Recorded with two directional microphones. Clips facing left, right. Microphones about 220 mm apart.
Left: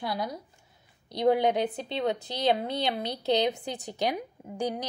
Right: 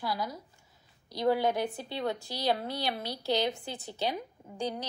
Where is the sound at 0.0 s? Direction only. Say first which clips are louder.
Left 2 dB; 20° left (ahead or behind).